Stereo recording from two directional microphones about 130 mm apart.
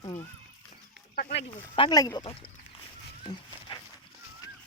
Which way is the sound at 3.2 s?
40° left (ahead or behind).